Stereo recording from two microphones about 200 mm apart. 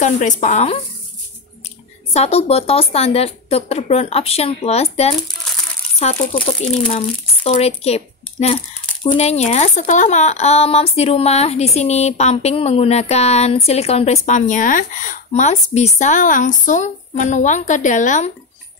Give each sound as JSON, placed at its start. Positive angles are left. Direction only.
{"t": 0.0, "sound": "speech", "side_deg": 40}
{"t": 2.1, "sound": "speech", "side_deg": 30}
{"t": 6.9, "sound": "speech", "side_deg": 30}